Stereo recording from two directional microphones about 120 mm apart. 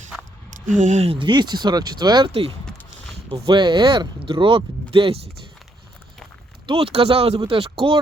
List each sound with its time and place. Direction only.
0.5 s speech: 90° right
1.0 s speech: 45° right (ahead or behind)
3.2 s speech: 45° right (ahead or behind)
6.7 s speech: 55° right (ahead or behind)